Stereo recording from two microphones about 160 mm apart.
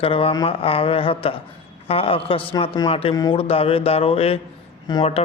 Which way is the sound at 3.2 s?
25° left (ahead or behind).